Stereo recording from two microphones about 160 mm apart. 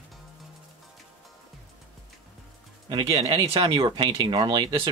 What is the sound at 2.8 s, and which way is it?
Speech, 35° right (ahead or behind).